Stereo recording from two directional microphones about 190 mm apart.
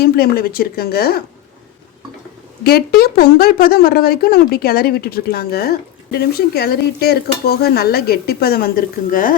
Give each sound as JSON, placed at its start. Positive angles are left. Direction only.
{"t": 0.0, "sound": "speech", "side_deg": 55}
{"t": 2.6, "sound": "speech", "side_deg": 55}